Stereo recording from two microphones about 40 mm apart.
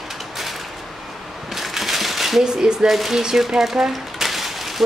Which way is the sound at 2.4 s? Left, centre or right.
Centre.